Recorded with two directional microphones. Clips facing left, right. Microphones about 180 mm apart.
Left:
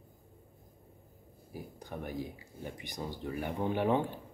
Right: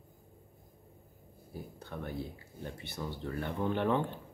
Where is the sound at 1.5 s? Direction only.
15° left (ahead or behind).